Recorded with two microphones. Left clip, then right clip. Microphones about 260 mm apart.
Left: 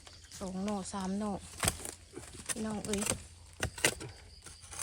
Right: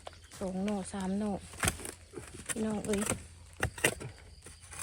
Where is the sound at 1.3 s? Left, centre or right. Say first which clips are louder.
Right 1 dB; left.